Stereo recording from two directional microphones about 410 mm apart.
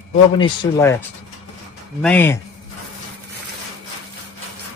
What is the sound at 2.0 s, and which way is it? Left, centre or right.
Mantra, centre.